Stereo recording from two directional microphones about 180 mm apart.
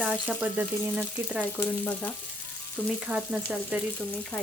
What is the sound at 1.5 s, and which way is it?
Frying, 10° left (ahead or behind).